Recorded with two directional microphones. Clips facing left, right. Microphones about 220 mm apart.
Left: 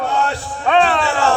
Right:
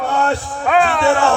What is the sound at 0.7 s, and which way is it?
Music, 5° right (ahead or behind).